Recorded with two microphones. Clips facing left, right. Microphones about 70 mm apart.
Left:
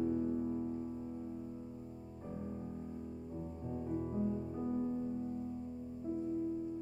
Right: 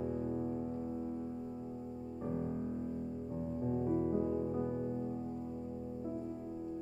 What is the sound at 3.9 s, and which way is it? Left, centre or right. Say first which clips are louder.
Music: right 2 dB; right.